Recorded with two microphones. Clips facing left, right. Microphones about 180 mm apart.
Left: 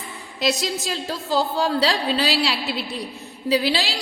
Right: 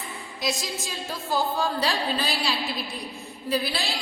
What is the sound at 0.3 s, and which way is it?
A woman's voice, 75° left (ahead or behind).